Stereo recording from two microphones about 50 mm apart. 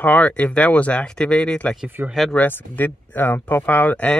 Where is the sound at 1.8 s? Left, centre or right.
Right.